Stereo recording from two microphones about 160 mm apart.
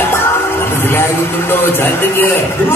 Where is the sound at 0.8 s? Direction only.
15° left (ahead or behind).